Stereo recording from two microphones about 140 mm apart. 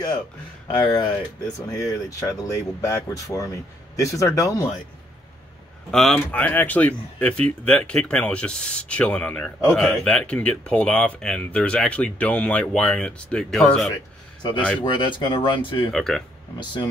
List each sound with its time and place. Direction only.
0.7 s speech: 35° left (ahead or behind)
5.9 s speech: 5° left (ahead or behind)
14.8 s speech: 35° left (ahead or behind)
15.9 s speech: 5° left (ahead or behind)